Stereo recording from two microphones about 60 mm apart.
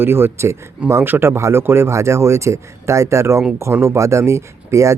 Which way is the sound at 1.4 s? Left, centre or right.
Right.